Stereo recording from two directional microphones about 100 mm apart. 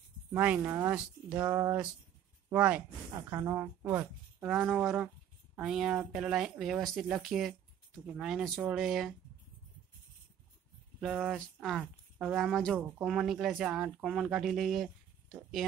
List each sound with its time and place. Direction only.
0.3 s speech: 15° right (ahead or behind)
1.5 s a woman's voice: 25° right (ahead or behind)
2.5 s speech: 10° right (ahead or behind)
3.2 s a woman's voice: 30° right (ahead or behind); by 4.5 s 15° right (ahead or behind)
4.5 s speech: centre (ahead or behind)
11.0 s speech: centre (ahead or behind)